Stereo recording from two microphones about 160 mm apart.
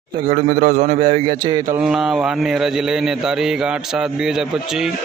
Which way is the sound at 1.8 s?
Centre (ahead or behind).